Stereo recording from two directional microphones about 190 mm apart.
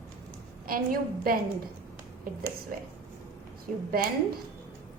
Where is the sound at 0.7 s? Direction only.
50° right (ahead or behind).